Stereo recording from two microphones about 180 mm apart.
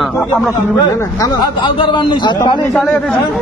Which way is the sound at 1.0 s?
20° left (ahead or behind).